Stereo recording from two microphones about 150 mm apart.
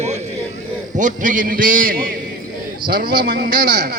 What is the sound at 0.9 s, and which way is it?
A man's voice, 60° right (ahead or behind).